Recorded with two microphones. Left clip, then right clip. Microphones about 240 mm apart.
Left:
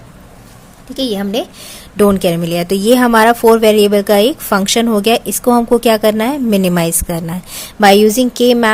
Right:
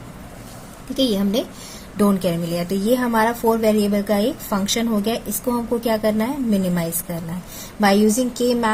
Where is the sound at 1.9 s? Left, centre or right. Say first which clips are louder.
Left 9 dB; left.